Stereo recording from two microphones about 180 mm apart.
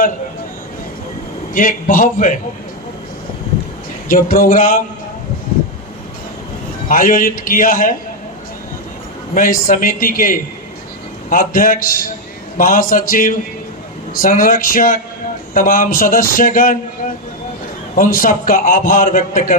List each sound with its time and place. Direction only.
1.5 s a man's voice: 50° left (ahead or behind)
4.1 s a man's voice: 50° left (ahead or behind)
6.8 s a man's voice: 50° left (ahead or behind)
9.3 s a man's voice: 50° left (ahead or behind)
17.9 s a man's voice: 50° left (ahead or behind)